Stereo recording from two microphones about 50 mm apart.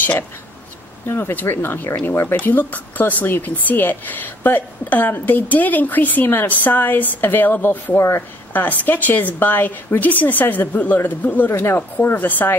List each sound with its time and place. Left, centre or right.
1.0 s speech: left